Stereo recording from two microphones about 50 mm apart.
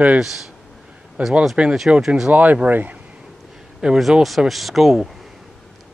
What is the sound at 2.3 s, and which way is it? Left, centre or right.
Speech, right.